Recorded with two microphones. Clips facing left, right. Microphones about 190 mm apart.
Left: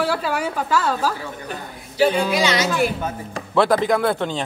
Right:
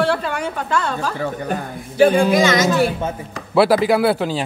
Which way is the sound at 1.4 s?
50° right (ahead or behind).